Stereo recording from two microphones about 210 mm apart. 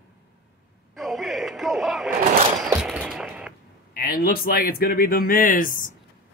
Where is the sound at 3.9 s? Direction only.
45° left (ahead or behind).